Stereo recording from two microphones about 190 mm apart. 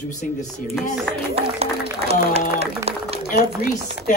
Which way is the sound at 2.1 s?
35° right (ahead or behind).